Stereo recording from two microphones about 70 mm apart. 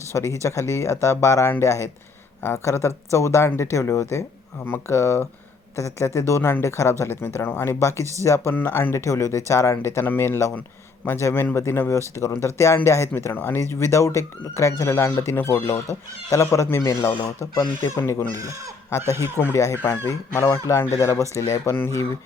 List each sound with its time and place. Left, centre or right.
0.1 s speech: left
8.5 s speech: left
16.6 s speech: left
17.5 s speech: left
17.8 s speech: left
18.3 s speech: right
18.9 s speech: left
19.4 s speech: left
20.7 s speech: left